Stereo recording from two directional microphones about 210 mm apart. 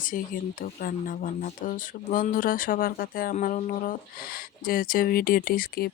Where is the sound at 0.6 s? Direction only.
40° left (ahead or behind).